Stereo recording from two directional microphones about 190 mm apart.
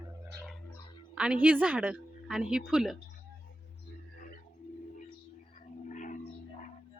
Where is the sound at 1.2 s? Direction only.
5° right (ahead or behind).